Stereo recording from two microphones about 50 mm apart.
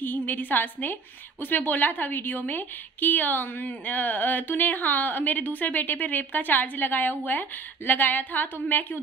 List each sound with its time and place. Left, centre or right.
0.0 s a woman's voice: left